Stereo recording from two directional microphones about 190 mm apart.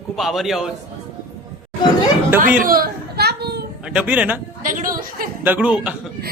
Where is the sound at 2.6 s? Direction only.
50° right (ahead or behind).